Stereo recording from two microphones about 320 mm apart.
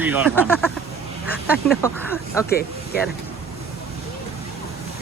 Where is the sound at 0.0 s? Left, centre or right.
Centre.